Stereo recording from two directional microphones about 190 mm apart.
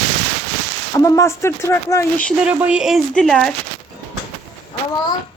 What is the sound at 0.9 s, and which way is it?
Speech, 15° left (ahead or behind).